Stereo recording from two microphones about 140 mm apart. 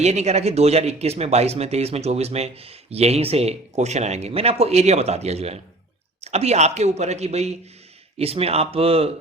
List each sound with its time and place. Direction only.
0.0 s speech: 50° right (ahead or behind)